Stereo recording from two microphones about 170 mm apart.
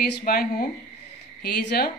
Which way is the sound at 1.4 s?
70° left (ahead or behind).